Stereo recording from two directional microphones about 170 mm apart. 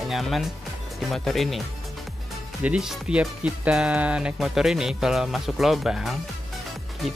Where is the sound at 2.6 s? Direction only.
5° right (ahead or behind).